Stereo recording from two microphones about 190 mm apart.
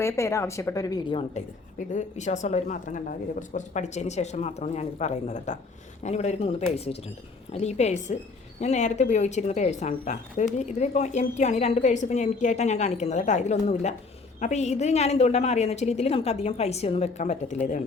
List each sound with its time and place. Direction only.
0.0 s speech: 15° left (ahead or behind)
1.9 s speech: 40° left (ahead or behind)